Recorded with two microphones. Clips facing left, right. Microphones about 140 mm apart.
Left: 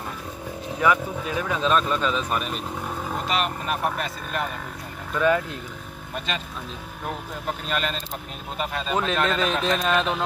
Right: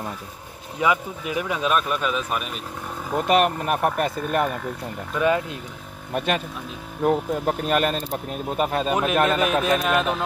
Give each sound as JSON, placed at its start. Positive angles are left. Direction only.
{"t": 0.7, "sound": "speech", "side_deg": -15}
{"t": 3.3, "sound": "speech", "side_deg": -55}
{"t": 5.1, "sound": "speech", "side_deg": -20}
{"t": 6.1, "sound": "speech", "side_deg": -55}
{"t": 8.9, "sound": "speech", "side_deg": -10}